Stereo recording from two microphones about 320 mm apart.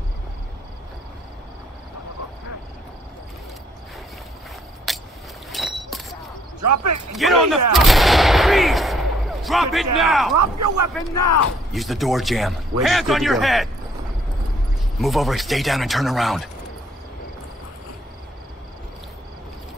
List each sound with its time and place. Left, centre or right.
4.9 s a sound: centre
6.6 s speech: right
7.2 s speech: centre
7.7 s gunshot: centre
9.9 s speech: centre
10.3 s speech: right
11.1 s speech: left
11.7 s speech: centre
15.0 s speech: centre